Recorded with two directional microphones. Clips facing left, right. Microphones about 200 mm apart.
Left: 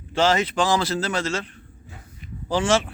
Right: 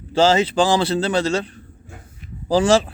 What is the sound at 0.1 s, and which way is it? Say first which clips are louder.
A man's voice: right 5 dB; 30° right (ahead or behind).